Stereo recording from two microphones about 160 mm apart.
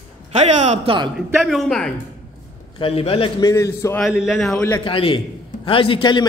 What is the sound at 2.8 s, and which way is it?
Speech, 35° left (ahead or behind).